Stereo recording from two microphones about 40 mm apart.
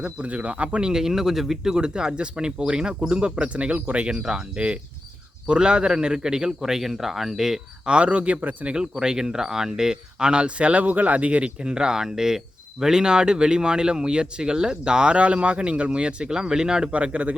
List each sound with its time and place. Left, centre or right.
0.0 s speech: right
0.8 s a man's voice: centre
4.2 s a man's voice: centre
7.9 s speech: right
8.7 s speech: right
11.6 s a man's voice: centre
16.9 s speech: right